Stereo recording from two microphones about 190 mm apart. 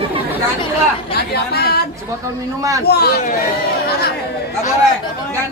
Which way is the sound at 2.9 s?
55° left (ahead or behind).